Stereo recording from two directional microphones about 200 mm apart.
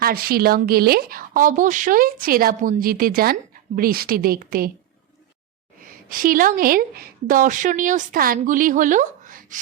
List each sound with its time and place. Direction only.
0.0 s a woman's voice: 50° right (ahead or behind)
5.8 s a woman's voice: 45° right (ahead or behind)